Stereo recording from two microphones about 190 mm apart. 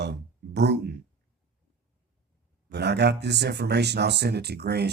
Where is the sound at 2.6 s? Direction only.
60° right (ahead or behind).